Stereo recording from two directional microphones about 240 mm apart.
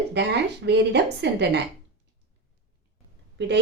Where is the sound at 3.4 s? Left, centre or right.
Right.